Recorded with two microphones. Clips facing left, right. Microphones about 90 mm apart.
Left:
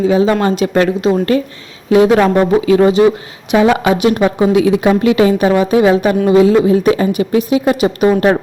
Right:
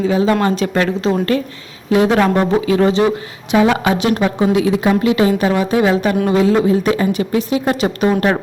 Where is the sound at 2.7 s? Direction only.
15° left (ahead or behind).